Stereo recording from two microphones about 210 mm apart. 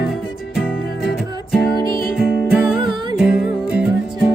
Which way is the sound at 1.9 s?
45° left (ahead or behind).